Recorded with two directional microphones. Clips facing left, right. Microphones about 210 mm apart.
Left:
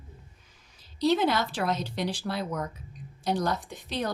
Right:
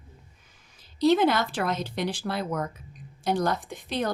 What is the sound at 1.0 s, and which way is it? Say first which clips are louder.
Speech: right 3 dB; 50° right (ahead or behind).